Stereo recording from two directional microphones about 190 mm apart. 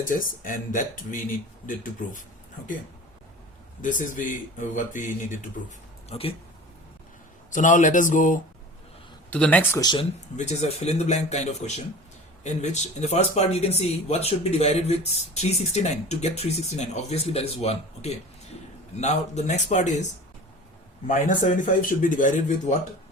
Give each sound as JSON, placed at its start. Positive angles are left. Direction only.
{"t": 0.1, "sound": "speech", "side_deg": 45}
{"t": 3.8, "sound": "speech", "side_deg": 45}
{"t": 6.1, "sound": "speech", "side_deg": 30}
{"t": 7.5, "sound": "speech", "side_deg": 40}
{"t": 9.3, "sound": "speech", "side_deg": 10}
{"t": 9.8, "sound": "speech", "side_deg": 25}
{"t": 10.3, "sound": "speech", "side_deg": 35}
{"t": 21.1, "sound": "speech", "side_deg": 40}